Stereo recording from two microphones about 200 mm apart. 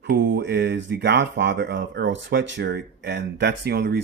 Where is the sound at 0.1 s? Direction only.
55° right (ahead or behind).